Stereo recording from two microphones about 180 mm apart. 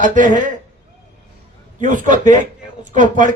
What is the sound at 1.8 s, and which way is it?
A man's voice, 45° right (ahead or behind).